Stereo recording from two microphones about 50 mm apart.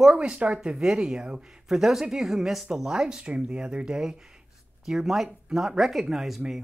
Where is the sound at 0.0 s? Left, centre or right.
Centre.